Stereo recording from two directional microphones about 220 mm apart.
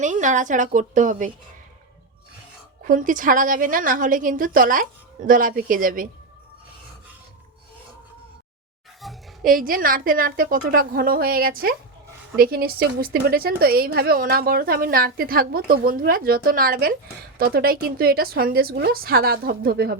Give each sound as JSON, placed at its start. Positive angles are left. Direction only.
{"t": 0.0, "sound": "a woman's voice", "side_deg": -35}
{"t": 2.8, "sound": "a woman's voice", "side_deg": -35}
{"t": 9.0, "sound": "a sound", "side_deg": 0}
{"t": 9.5, "sound": "a woman's voice", "side_deg": -40}